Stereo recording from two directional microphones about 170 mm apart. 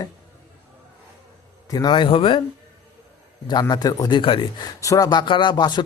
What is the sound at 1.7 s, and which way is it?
Speech, 25° left (ahead or behind).